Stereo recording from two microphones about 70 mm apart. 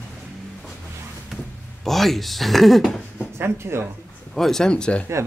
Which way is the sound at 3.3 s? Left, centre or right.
Right.